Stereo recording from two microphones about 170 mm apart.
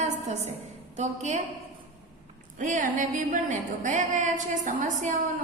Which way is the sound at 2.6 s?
50° right (ahead or behind).